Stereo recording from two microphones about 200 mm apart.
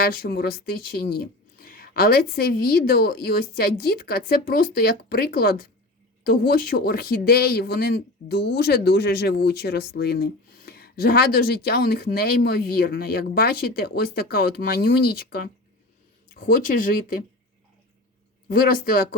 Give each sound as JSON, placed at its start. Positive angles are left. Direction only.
{"t": 0.0, "sound": "speech", "side_deg": 50}
{"t": 18.4, "sound": "speech", "side_deg": 45}